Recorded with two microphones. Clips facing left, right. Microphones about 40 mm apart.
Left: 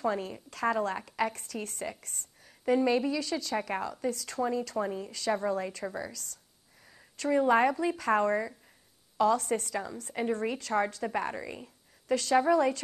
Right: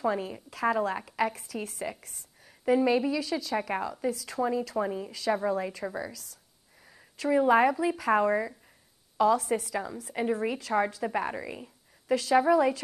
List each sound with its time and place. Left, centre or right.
0.0 s a woman's voice: centre